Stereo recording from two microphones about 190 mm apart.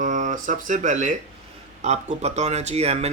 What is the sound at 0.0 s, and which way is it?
Speech, 40° right (ahead or behind).